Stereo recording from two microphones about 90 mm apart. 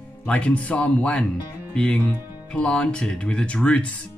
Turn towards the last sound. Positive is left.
turn(degrees=15)  # may be behind; listen again after turning